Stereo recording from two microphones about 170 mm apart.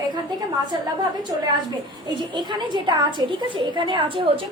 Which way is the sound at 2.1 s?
25° right (ahead or behind).